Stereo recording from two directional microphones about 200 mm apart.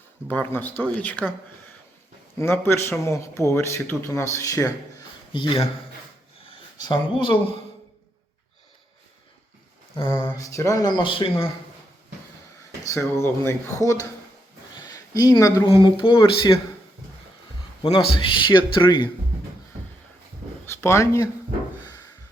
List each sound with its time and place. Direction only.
0.3 s a man's voice: 10° left (ahead or behind)
2.4 s a man's voice: 10° left (ahead or behind)
6.7 s speech: 20° left (ahead or behind)
10.1 s a man's voice: 10° left (ahead or behind)
12.9 s a man's voice: 15° left (ahead or behind)
17.8 s speech: 25° left (ahead or behind)
20.7 s speech: 15° left (ahead or behind)